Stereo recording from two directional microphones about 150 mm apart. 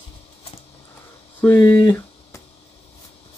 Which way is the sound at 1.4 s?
15° left (ahead or behind).